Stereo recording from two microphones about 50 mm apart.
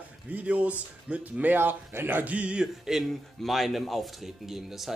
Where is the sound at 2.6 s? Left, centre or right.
Centre.